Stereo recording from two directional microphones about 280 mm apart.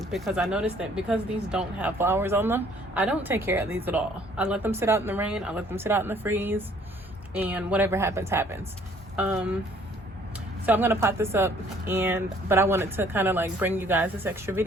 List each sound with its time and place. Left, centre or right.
0.0 s speech: centre
10.7 s speech: centre